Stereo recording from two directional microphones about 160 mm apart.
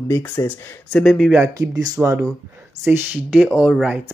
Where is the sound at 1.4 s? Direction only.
20° right (ahead or behind); by 4.0 s 5° right (ahead or behind).